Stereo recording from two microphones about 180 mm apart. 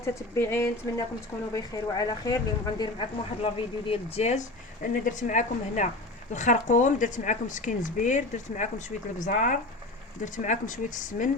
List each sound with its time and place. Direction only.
0.0 s speech: 15° left (ahead or behind); by 11.3 s 45° left (ahead or behind)